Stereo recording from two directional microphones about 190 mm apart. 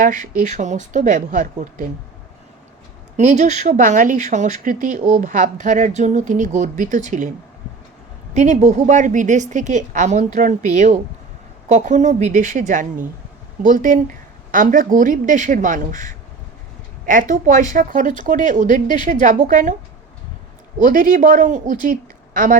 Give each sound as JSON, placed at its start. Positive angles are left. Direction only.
{"t": 0.0, "sound": "speech", "side_deg": -40}
{"t": 3.2, "sound": "speech", "side_deg": -40}
{"t": 8.3, "sound": "speech", "side_deg": -40}
{"t": 20.7, "sound": "speech", "side_deg": -45}